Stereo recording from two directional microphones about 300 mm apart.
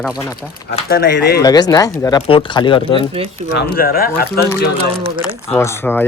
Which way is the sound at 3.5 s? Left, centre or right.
Left.